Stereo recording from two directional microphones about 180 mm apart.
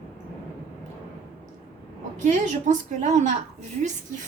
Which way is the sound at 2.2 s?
40° right (ahead or behind).